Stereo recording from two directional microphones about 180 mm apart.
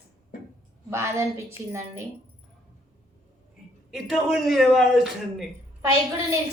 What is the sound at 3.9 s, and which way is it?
A man's voice, centre (ahead or behind).